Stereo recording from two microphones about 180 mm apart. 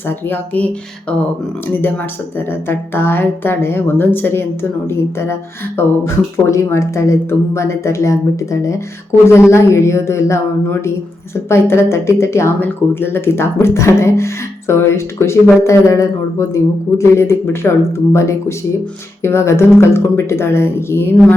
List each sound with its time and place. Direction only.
0.1 s speech: 10° left (ahead or behind)